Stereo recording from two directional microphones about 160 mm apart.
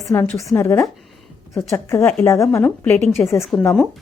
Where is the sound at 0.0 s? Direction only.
20° left (ahead or behind).